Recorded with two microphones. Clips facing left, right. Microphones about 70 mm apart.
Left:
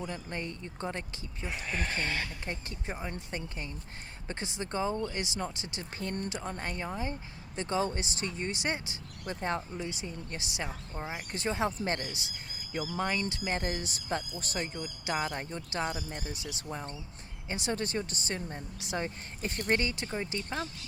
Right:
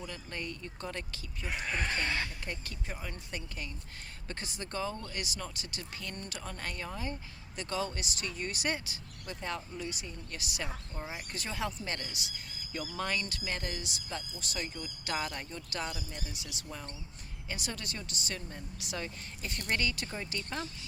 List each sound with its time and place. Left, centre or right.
0.0 s speech: left
6.2 s speech: left
13.0 s speech: centre
13.5 s speech: left
15.0 s speech: centre